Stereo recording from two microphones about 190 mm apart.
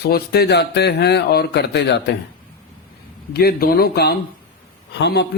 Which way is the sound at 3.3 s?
55° left (ahead or behind).